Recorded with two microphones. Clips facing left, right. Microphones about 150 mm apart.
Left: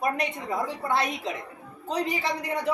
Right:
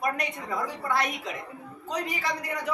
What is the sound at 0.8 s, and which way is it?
Speech, 25° left (ahead or behind).